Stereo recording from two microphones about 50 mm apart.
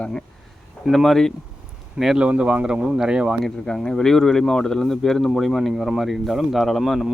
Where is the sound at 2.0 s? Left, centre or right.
Right.